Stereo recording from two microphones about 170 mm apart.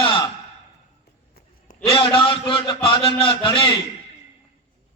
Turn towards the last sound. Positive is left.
turn(degrees=30)  # may be behind; listen again after turning